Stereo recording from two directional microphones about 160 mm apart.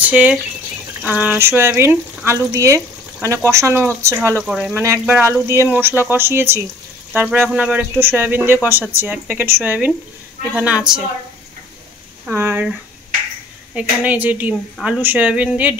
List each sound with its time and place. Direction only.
0.0 s speech: 10° right (ahead or behind)
4.4 s speech: 5° right (ahead or behind)
12.3 s speech: 15° right (ahead or behind)
13.7 s speech: 10° right (ahead or behind)